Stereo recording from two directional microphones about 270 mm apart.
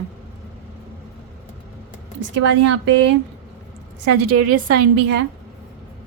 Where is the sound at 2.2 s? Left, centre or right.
Right.